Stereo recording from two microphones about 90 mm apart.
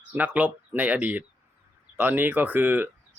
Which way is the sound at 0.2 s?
15° right (ahead or behind).